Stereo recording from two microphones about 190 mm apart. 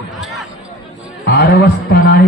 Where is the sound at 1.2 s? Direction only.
55° left (ahead or behind).